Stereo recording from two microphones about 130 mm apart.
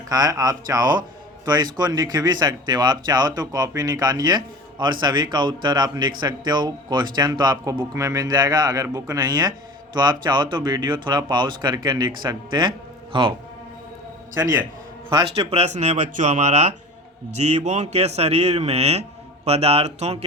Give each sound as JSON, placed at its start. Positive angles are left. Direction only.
{"t": 0.1, "sound": "speech", "side_deg": -30}
{"t": 14.3, "sound": "a man's voice", "side_deg": -25}
{"t": 15.1, "sound": "speech", "side_deg": -45}